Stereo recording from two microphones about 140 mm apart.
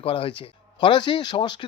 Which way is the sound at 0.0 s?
40° left (ahead or behind).